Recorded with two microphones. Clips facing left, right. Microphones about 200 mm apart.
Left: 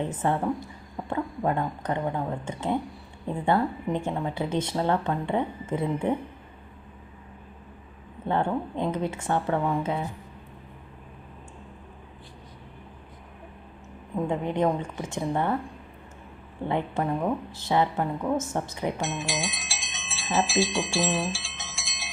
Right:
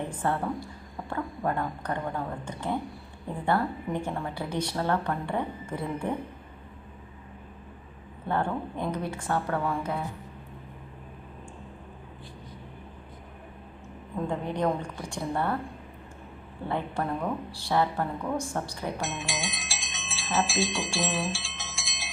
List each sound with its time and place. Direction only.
0.0 s speech: 20° left (ahead or behind)
8.3 s speech: 20° left (ahead or behind)
14.3 s speech: 20° left (ahead or behind)
16.6 s speech: 20° left (ahead or behind)
19.0 s bicycle bell: centre (ahead or behind)